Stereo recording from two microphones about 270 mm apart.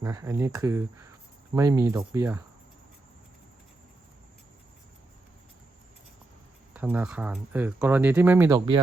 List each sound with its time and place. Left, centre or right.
0.0 s speech: centre
6.7 s speech: centre